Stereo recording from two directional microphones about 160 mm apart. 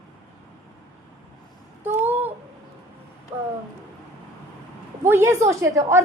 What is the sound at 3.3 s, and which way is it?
Speech, 15° right (ahead or behind).